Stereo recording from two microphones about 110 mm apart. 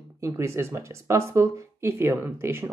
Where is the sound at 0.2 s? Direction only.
25° right (ahead or behind).